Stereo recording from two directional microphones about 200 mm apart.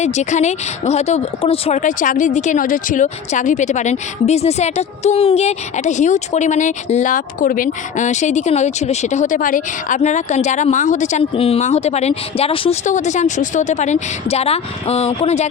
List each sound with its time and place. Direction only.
0.0 s speech: 35° left (ahead or behind)